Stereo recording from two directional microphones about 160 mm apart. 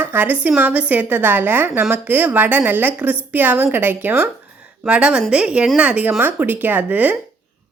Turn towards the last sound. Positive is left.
turn(degrees=-10)  # may be behind; listen again after turning